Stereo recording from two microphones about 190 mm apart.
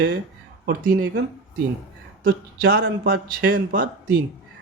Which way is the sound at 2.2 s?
50° right (ahead or behind).